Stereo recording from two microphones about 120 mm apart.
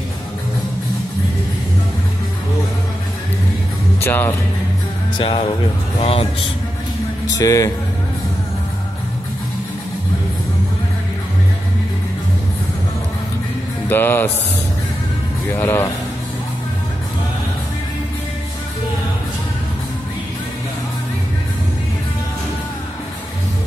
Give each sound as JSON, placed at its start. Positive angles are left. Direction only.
{"t": 4.0, "sound": "music", "side_deg": 15}
{"t": 5.2, "sound": "speech", "side_deg": 50}
{"t": 7.3, "sound": "speech", "side_deg": 30}
{"t": 13.8, "sound": "music", "side_deg": 15}
{"t": 15.5, "sound": "speech", "side_deg": 20}